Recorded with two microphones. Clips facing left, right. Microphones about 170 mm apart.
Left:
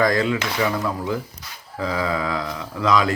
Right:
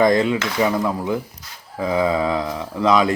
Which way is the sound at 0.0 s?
20° right (ahead or behind).